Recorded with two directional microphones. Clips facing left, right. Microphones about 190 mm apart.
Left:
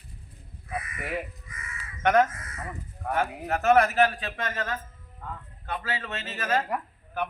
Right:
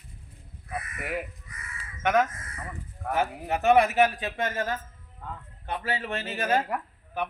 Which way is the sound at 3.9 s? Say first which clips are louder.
Right 1 dB; 20° right (ahead or behind).